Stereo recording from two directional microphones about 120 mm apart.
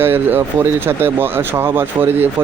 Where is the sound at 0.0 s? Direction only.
15° right (ahead or behind).